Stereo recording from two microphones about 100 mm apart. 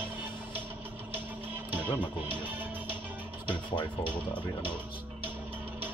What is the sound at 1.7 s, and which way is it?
Music, 15° right (ahead or behind).